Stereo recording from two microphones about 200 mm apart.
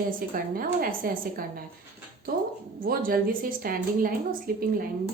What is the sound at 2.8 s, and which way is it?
A woman's voice, 45° right (ahead or behind).